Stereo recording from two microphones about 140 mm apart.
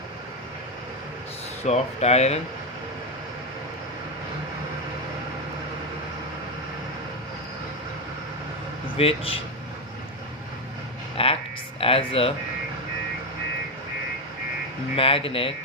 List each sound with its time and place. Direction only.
1.6 s speech: 50° left (ahead or behind)
9.0 s speech: 45° left (ahead or behind)
11.2 s a sound: 40° left (ahead or behind)
11.8 s speech: 40° left (ahead or behind)
14.9 s speech: 40° left (ahead or behind)